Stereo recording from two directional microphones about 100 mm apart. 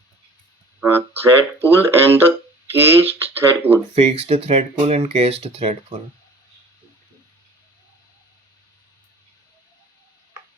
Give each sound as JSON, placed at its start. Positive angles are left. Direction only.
{"t": 0.8, "sound": "speech", "side_deg": -20}
{"t": 3.9, "sound": "speech", "side_deg": -90}